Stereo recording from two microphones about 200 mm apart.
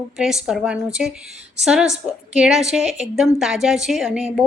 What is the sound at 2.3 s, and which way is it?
A woman's voice, 5° right (ahead or behind).